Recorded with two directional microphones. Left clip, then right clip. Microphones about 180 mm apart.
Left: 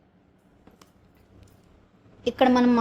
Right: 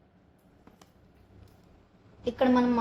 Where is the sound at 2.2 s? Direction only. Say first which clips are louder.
Left 5 dB; 60° left (ahead or behind).